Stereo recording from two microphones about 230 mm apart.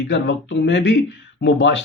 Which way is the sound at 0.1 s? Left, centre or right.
Left.